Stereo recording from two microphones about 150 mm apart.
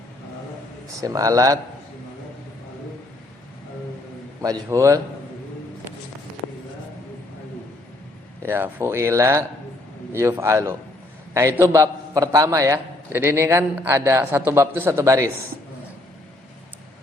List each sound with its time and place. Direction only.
1.0 s a man's voice: 25° right (ahead or behind)
4.4 s a man's voice: 20° right (ahead or behind)
8.4 s a man's voice: 15° right (ahead or behind)